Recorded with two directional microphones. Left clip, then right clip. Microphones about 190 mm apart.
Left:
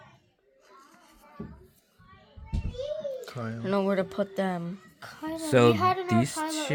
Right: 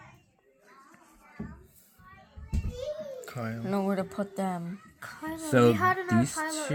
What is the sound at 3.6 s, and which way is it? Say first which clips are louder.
Speech: left 5 dB; 35° left (ahead or behind).